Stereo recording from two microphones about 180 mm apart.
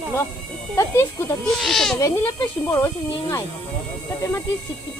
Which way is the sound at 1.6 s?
Centre (ahead or behind).